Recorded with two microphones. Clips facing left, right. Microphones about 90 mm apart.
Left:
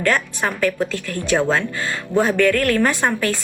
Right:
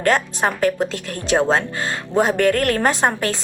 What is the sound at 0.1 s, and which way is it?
A woman's voice, 25° right (ahead or behind).